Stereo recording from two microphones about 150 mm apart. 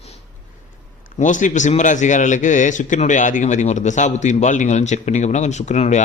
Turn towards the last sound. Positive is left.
turn(degrees=50)  # may be behind; listen again after turning